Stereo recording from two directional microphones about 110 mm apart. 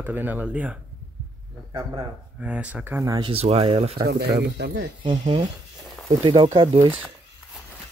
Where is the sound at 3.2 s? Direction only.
60° right (ahead or behind).